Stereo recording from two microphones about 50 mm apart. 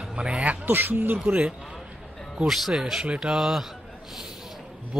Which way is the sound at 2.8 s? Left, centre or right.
Centre.